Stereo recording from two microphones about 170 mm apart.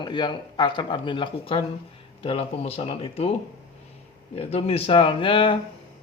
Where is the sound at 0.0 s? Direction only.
25° left (ahead or behind).